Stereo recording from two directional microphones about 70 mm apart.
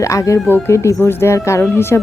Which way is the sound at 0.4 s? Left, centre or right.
Left.